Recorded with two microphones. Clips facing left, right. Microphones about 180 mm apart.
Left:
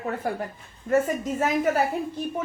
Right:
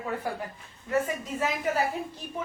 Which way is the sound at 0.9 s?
45° left (ahead or behind).